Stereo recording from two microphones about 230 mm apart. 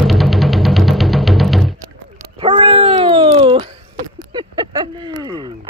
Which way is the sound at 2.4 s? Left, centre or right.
Right.